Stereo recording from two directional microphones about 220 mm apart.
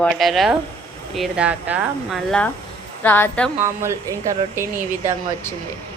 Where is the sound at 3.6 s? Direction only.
10° right (ahead or behind).